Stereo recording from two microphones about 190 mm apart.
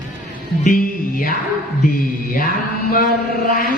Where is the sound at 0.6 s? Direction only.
45° left (ahead or behind).